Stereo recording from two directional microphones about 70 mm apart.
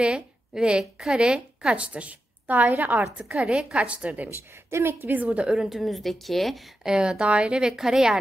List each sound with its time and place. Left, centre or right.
0.0 s a woman's voice: centre
3.3 s speech: centre
4.6 s a woman's voice: right; by 5.7 s centre
5.7 s speech: centre